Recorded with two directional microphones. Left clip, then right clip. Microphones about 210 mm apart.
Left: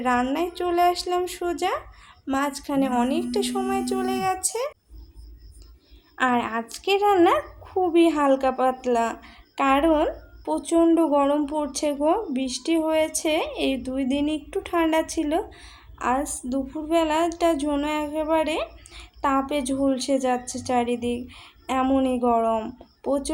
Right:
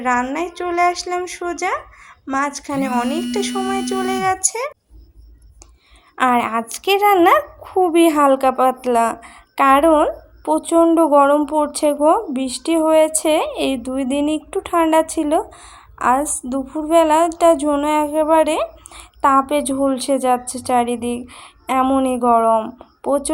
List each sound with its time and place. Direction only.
0.0 s speech: 5° right (ahead or behind)
6.1 s a woman's voice: 20° right (ahead or behind)